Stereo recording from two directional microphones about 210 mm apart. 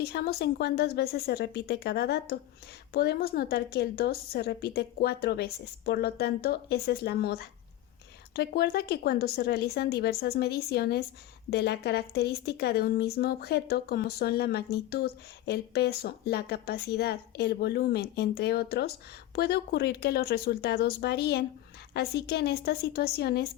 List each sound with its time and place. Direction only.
0.0 s speech: 50° left (ahead or behind)